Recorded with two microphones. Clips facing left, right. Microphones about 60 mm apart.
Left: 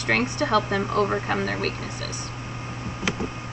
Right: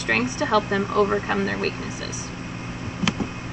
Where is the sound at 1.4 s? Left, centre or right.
Right.